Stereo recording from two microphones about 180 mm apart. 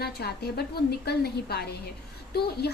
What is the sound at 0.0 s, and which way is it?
A woman's voice, 60° left (ahead or behind).